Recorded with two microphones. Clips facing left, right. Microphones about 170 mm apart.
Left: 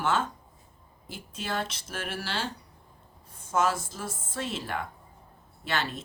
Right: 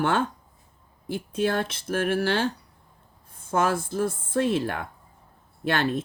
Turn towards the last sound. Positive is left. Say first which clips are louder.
# right 7 dB
turn(degrees=-55)  # may be behind; listen again after turning